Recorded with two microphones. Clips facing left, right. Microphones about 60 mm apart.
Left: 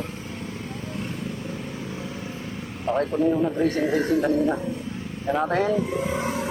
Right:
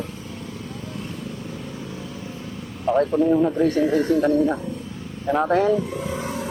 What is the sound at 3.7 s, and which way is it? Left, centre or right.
Speech, centre.